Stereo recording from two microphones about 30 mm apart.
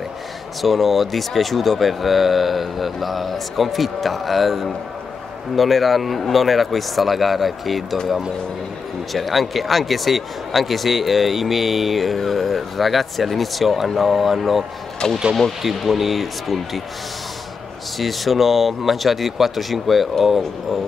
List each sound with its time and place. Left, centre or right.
0.6 s speech: centre
9.1 s speech: centre
15.0 s speech: centre
15.6 s speech: centre
17.9 s speech: centre